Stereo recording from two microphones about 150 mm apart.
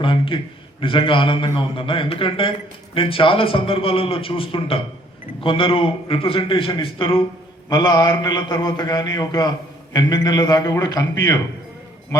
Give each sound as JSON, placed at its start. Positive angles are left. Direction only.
{"t": 0.0, "sound": "a man's voice", "side_deg": 35}